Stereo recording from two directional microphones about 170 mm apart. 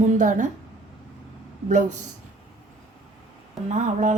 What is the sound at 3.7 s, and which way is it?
Speech, 50° right (ahead or behind).